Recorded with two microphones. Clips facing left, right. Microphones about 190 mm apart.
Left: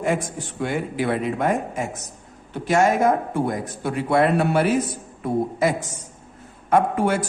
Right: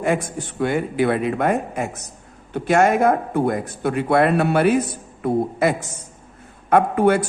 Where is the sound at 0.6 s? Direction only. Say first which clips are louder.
Right 4 dB; 60° right (ahead or behind).